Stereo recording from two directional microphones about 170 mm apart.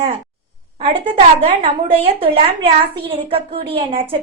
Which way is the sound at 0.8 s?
35° right (ahead or behind).